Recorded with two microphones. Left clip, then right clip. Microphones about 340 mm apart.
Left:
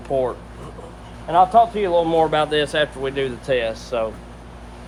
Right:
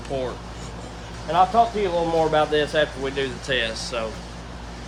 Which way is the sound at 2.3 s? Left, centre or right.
Left.